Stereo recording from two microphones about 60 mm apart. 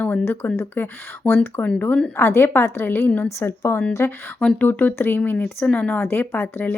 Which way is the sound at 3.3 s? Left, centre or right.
Left.